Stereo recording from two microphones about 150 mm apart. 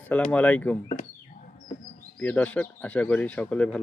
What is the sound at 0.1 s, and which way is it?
Speech, 10° left (ahead or behind).